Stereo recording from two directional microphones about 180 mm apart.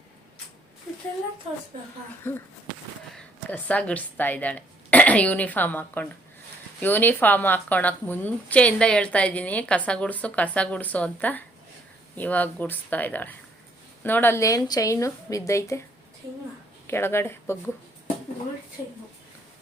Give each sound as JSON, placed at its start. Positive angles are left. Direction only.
{"t": 3.5, "sound": "speech", "side_deg": 10}
{"t": 16.8, "sound": "speech", "side_deg": 15}